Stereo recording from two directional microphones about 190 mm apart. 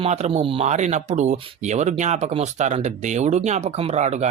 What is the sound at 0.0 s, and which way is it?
Speech, 35° right (ahead or behind).